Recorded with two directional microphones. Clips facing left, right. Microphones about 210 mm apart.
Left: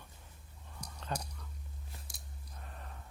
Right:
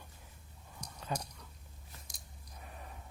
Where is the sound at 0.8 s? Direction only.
10° right (ahead or behind).